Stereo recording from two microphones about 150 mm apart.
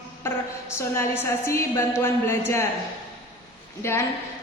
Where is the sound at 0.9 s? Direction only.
15° left (ahead or behind).